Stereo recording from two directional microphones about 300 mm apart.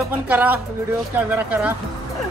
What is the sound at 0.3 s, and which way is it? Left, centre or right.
Speech, centre.